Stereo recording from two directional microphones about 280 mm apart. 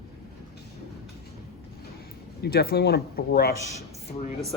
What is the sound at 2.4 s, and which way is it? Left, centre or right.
Speech, left.